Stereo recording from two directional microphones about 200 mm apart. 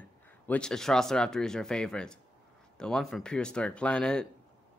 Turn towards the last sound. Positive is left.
turn(degrees=5)  # may be behind; listen again after turning